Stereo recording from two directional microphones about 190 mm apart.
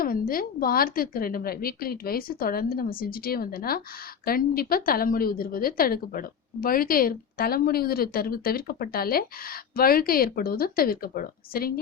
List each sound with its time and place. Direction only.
0.0 s a woman's voice: 50° left (ahead or behind)